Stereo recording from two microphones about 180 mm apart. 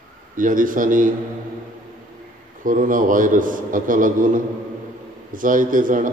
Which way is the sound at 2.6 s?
50° right (ahead or behind).